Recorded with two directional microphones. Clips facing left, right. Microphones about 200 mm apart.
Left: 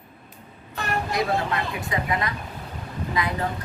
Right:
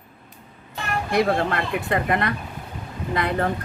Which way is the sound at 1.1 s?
60° right (ahead or behind).